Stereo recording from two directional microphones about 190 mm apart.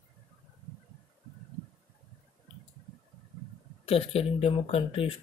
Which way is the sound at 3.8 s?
30° left (ahead or behind).